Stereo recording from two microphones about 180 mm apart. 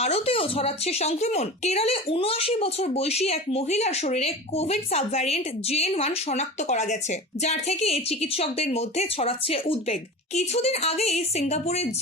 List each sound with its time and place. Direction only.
0.0 s a woman's voice: 35° left (ahead or behind)